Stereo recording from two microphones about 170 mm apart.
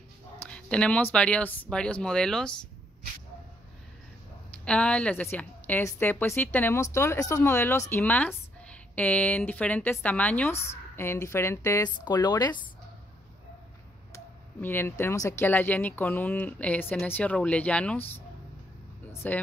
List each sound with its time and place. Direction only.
0.5 s a woman's voice: 5° left (ahead or behind)
4.6 s a woman's voice: 5° left (ahead or behind); by 12.5 s 25° left (ahead or behind)
14.6 s a woman's voice: 15° left (ahead or behind)
19.2 s a woman's voice: 10° left (ahead or behind)